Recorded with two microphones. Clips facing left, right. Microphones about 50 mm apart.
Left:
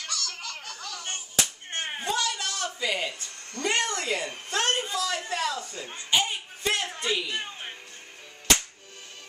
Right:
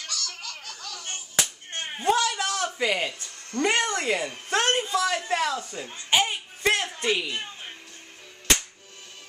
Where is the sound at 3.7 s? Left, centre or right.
Centre.